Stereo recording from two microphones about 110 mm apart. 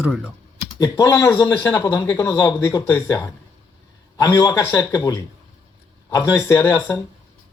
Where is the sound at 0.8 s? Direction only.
30° left (ahead or behind).